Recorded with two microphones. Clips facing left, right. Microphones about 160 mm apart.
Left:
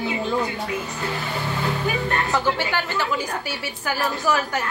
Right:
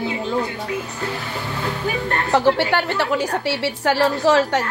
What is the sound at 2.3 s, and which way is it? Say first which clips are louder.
A woman's voice: right 6 dB; 70° right (ahead or behind).